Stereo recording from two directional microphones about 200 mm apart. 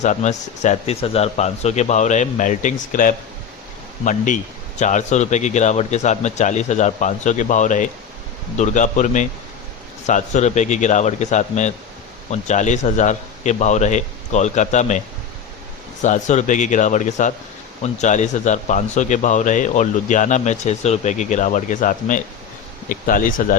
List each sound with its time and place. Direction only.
0.0 s speech: 35° left (ahead or behind)
16.0 s speech: 35° left (ahead or behind)